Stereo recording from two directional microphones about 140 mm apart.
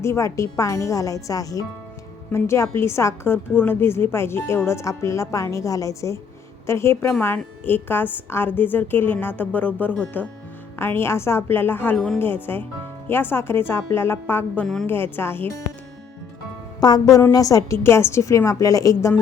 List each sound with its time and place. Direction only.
0.0 s a woman's voice: 20° left (ahead or behind)
11.9 s speech: 5° left (ahead or behind)
12.2 s a woman's voice: 15° left (ahead or behind)
16.8 s a woman's voice: 25° left (ahead or behind)